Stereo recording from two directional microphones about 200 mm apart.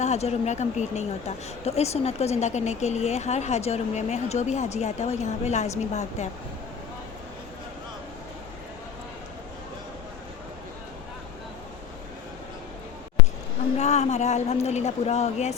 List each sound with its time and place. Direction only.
0.0 s speech: 35° left (ahead or behind)
13.7 s speech: 35° left (ahead or behind)